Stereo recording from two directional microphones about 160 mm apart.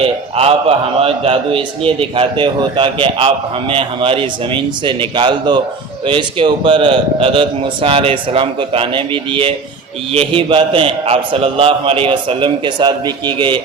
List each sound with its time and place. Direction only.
0.3 s a man's voice: 40° right (ahead or behind)